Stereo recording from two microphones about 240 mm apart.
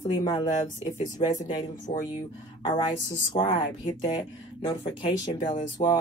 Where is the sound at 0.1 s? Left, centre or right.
Centre.